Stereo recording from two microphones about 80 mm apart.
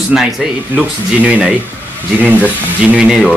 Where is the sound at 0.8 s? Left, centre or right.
Centre.